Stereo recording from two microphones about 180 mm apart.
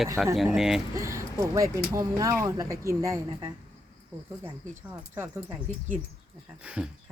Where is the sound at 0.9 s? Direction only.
15° right (ahead or behind).